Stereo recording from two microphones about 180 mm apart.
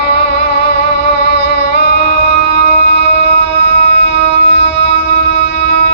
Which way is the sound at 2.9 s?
75° left (ahead or behind).